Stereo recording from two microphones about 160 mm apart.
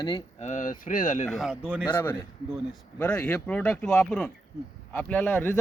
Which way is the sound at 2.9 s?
10° left (ahead or behind).